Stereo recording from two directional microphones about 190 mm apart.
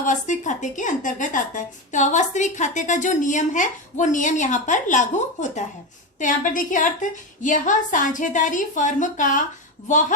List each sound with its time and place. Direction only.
0.0 s a woman's voice: 40° left (ahead or behind)